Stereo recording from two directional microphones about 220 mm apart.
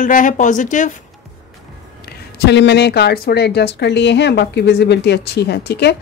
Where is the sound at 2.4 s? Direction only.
50° left (ahead or behind).